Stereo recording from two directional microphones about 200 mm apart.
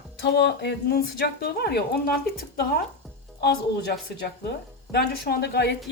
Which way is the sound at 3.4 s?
55° left (ahead or behind).